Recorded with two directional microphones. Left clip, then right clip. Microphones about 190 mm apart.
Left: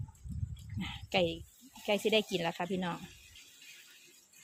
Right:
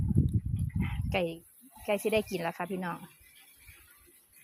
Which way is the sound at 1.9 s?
5° right (ahead or behind).